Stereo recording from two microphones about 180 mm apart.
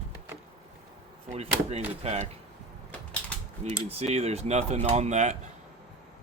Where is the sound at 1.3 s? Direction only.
35° right (ahead or behind).